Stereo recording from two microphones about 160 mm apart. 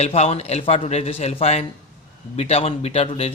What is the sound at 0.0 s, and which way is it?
A man's voice, 40° left (ahead or behind).